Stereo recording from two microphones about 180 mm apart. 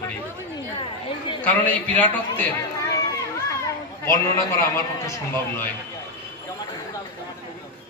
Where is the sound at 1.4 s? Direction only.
10° left (ahead or behind).